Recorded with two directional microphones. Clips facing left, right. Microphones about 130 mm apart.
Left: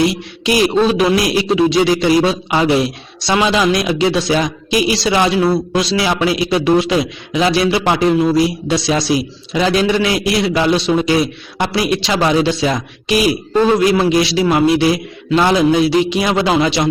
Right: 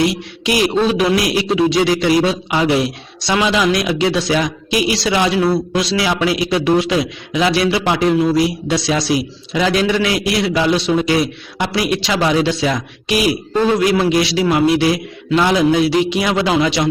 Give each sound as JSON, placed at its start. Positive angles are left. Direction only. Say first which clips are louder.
{"t": 0.1, "sound": "a man's voice", "louder": "left 2 dB", "side_deg": 30}